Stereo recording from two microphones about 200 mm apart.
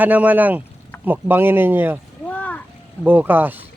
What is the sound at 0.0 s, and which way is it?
Speech, 10° right (ahead or behind).